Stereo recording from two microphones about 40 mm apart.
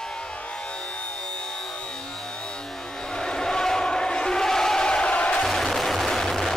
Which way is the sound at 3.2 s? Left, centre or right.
Centre.